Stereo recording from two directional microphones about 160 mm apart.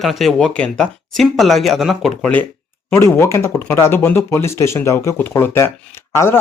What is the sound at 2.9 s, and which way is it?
Speech, 15° left (ahead or behind).